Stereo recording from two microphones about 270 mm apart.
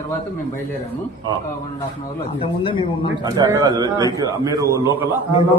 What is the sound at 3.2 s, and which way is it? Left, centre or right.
A man's voice, centre.